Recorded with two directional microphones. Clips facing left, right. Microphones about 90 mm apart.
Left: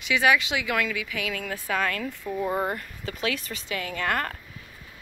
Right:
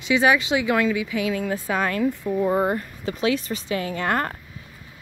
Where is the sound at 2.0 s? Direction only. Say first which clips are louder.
Right 7 dB; 10° right (ahead or behind).